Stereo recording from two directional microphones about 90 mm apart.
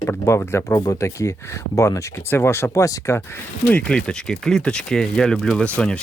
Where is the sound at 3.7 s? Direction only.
10° left (ahead or behind).